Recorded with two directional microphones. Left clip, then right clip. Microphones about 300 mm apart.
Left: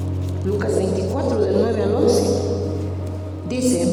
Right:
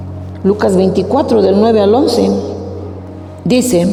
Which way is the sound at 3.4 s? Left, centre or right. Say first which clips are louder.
Right 14 dB; right.